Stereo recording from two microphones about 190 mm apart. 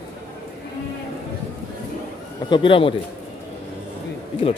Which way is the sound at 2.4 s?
25° left (ahead or behind).